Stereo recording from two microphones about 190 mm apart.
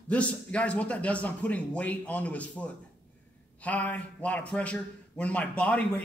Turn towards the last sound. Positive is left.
turn(degrees=5)  # may be behind; listen again after turning